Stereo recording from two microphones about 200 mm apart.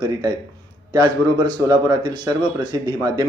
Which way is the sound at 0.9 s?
20° right (ahead or behind).